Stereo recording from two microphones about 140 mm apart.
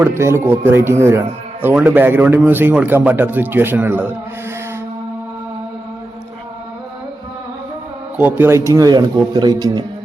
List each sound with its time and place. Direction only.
0.0 s a man's voice: 20° right (ahead or behind)
8.2 s speech: 15° right (ahead or behind)